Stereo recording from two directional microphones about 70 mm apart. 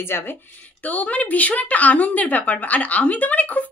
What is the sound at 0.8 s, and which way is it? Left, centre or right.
Speech, left.